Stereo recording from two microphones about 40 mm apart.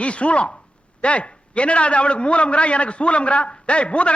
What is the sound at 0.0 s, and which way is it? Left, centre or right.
A man's voice, left.